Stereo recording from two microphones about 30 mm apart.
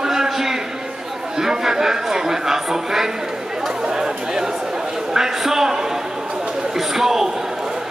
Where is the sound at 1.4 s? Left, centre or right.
Centre.